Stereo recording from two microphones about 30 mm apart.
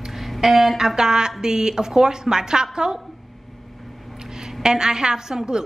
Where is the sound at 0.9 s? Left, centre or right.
Right.